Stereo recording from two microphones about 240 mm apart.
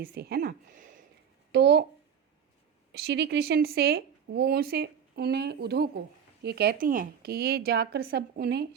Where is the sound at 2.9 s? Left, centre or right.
Right.